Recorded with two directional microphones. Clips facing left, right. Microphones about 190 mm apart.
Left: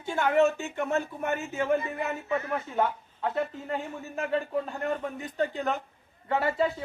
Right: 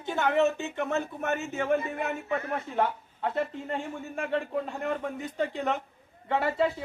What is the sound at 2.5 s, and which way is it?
A man's voice, centre (ahead or behind).